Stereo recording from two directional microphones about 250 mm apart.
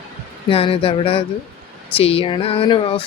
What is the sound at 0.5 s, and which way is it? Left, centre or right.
Speech, left.